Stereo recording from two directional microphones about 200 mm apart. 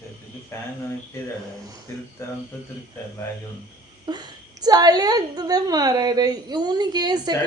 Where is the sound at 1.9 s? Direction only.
15° left (ahead or behind).